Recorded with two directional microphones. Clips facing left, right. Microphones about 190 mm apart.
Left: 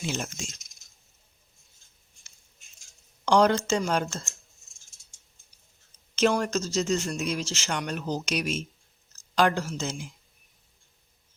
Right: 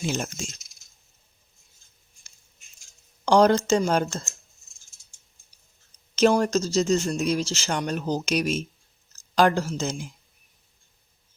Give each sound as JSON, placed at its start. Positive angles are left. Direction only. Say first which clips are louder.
{"t": 0.0, "sound": "speech", "louder": "right 4 dB", "side_deg": -45}
{"t": 3.2, "sound": "speech", "louder": "right 3 dB", "side_deg": -40}
{"t": 6.3, "sound": "speech", "louder": "right 5 dB", "side_deg": -35}